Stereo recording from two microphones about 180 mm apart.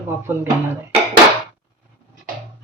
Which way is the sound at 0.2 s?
10° right (ahead or behind).